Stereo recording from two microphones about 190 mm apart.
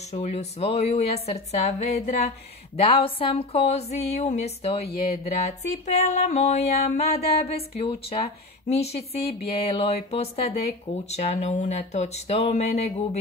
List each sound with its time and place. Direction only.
0.1 s music: 35° left (ahead or behind)